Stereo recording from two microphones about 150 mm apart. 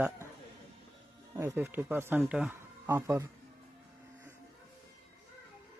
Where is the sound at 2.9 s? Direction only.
15° right (ahead or behind).